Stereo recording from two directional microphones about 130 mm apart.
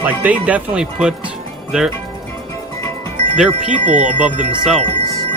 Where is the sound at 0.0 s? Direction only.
10° right (ahead or behind).